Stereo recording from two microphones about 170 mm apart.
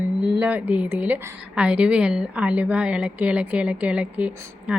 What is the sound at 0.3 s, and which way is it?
A woman's voice, 10° right (ahead or behind).